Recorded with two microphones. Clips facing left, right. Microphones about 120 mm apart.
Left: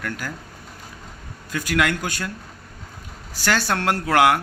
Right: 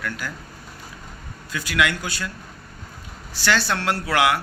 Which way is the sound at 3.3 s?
45° left (ahead or behind).